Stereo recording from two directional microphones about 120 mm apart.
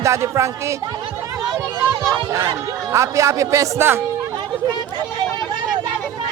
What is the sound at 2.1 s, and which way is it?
A man's voice, 35° right (ahead or behind).